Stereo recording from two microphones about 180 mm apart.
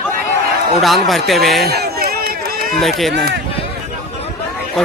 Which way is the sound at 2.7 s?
Centre (ahead or behind).